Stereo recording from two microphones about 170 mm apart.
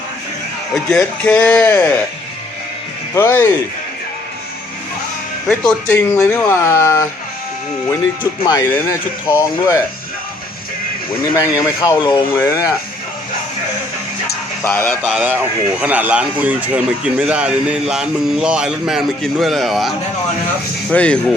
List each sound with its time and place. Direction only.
0.7 s speech: 5° left (ahead or behind)
3.2 s speech: 15° left (ahead or behind)
5.5 s speech: 10° left (ahead or behind)
8.2 s speech: 25° left (ahead or behind)
11.3 s speech: 20° left (ahead or behind)
14.6 s speech: 15° left (ahead or behind)
14.8 s speech: centre (ahead or behind)
15.8 s speech: 10° right (ahead or behind)
20.9 s speech: 5° left (ahead or behind)